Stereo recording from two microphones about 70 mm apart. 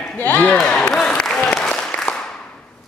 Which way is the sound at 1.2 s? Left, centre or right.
Centre.